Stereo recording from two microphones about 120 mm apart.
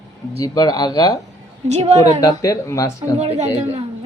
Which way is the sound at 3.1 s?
65° right (ahead or behind).